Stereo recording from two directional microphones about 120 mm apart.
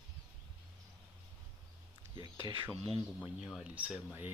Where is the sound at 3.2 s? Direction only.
10° right (ahead or behind).